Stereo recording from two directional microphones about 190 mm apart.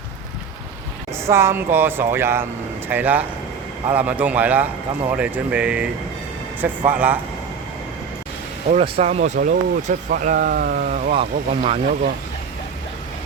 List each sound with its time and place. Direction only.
1.3 s speech: 15° right (ahead or behind)
8.7 s speech: 35° right (ahead or behind)